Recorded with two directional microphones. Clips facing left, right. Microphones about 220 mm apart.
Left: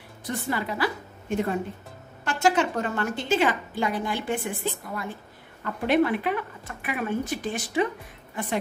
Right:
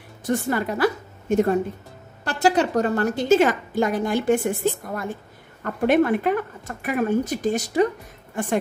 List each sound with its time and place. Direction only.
0.2 s a woman's voice: 50° right (ahead or behind)